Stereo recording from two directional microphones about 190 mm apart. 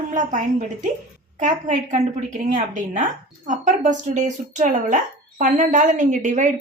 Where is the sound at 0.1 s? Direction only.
40° right (ahead or behind).